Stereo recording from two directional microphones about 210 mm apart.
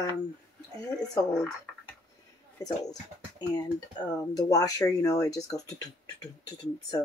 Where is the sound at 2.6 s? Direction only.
15° left (ahead or behind).